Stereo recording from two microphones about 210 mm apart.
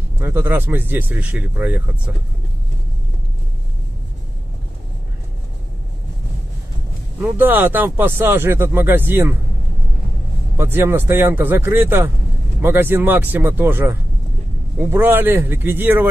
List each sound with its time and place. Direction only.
0.2 s speech: 10° right (ahead or behind)
7.2 s speech: 10° right (ahead or behind)
10.6 s speech: 10° right (ahead or behind)